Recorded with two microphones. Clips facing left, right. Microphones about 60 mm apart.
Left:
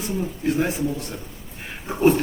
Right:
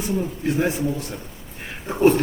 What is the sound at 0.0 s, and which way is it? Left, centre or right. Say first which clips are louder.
Speech: right 1 dB; centre.